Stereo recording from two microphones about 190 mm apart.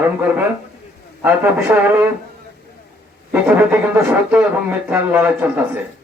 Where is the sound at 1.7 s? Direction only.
10° right (ahead or behind).